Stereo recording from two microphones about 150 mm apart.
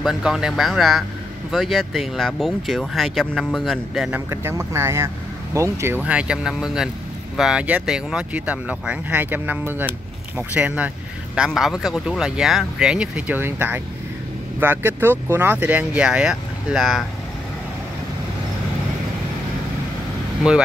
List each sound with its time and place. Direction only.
0.0 s speech: 5° right (ahead or behind)
4.3 s speech: 15° right (ahead or behind); by 17.0 s centre (ahead or behind)
20.5 s speech: 5° right (ahead or behind)